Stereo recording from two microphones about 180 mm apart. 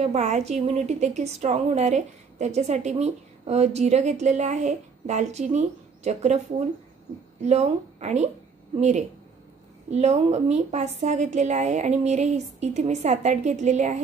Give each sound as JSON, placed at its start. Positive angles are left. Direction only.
{"t": 0.0, "sound": "a woman's voice", "side_deg": -40}
{"t": 7.4, "sound": "a woman's voice", "side_deg": -40}